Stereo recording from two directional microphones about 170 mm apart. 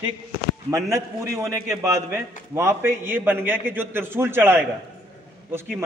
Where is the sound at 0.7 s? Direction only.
15° right (ahead or behind).